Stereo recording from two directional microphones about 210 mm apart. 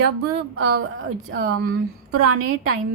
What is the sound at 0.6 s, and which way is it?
Speech, 50° right (ahead or behind).